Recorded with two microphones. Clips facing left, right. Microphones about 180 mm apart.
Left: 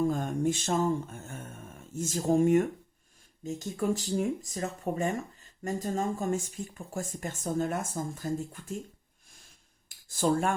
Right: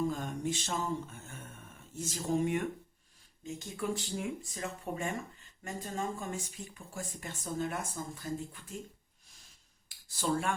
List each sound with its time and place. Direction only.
0.1 s speech: 50° left (ahead or behind)
10.1 s speech: 50° left (ahead or behind)